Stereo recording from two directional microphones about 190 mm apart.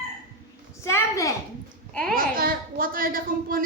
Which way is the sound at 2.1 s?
50° right (ahead or behind).